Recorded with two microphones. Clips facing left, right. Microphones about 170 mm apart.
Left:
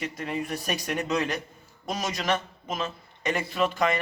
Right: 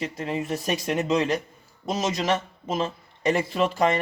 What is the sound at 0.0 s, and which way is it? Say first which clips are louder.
Speech: right 3 dB; 30° right (ahead or behind).